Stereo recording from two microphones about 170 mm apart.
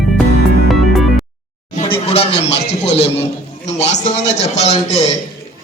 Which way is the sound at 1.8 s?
35° left (ahead or behind).